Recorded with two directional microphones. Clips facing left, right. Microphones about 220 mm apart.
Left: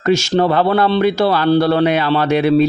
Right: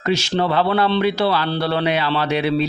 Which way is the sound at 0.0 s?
45° left (ahead or behind).